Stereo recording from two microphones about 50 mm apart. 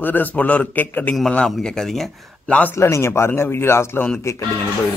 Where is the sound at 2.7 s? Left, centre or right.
Left.